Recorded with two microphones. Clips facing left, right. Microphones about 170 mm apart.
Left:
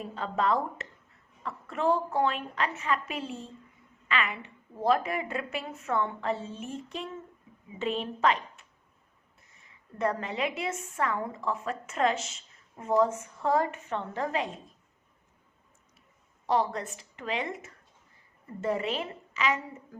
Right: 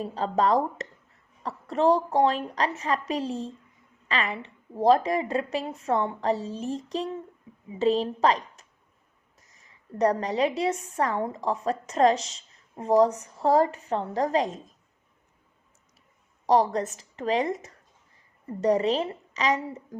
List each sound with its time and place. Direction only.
0.0 s a woman's voice: 35° right (ahead or behind)
16.5 s a woman's voice: 40° right (ahead or behind)